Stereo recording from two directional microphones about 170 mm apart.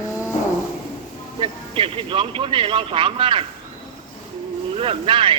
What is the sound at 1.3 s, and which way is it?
Speech, 30° right (ahead or behind).